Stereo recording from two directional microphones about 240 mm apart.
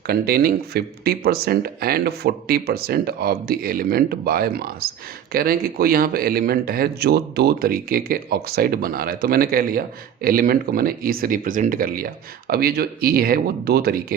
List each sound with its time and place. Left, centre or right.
0.1 s a man's voice: right